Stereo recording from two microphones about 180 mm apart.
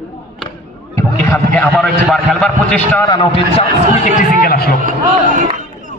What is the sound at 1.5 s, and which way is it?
A man's voice, centre (ahead or behind).